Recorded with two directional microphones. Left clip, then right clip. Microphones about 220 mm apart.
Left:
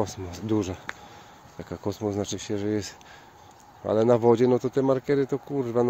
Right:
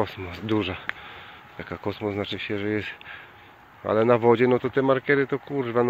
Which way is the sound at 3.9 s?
20° left (ahead or behind).